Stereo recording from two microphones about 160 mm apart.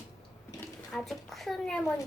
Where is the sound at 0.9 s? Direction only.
Centre (ahead or behind).